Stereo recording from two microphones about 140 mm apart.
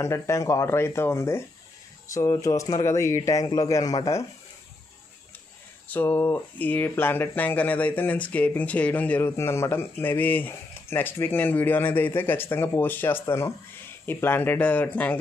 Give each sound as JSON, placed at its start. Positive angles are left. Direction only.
{"t": 0.0, "sound": "speech", "side_deg": 20}
{"t": 5.9, "sound": "speech", "side_deg": 15}